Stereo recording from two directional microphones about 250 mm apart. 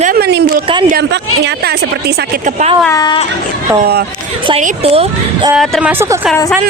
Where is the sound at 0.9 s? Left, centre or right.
Right.